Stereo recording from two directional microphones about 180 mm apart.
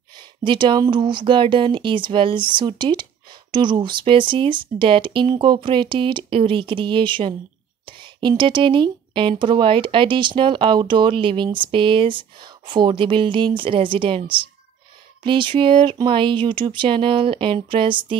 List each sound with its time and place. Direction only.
0.4 s speech: 25° right (ahead or behind)